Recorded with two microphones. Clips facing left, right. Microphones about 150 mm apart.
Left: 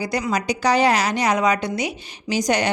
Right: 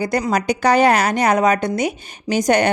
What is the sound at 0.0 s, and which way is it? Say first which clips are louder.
Speech: right 4 dB; 50° right (ahead or behind).